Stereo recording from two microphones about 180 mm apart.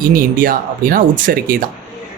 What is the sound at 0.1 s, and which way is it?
Speech, 50° right (ahead or behind).